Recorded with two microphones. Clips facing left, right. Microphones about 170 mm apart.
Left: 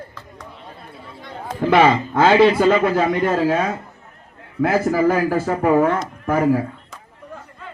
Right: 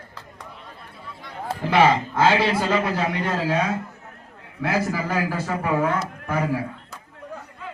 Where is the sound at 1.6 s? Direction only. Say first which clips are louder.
Left 4 dB; 55° left (ahead or behind).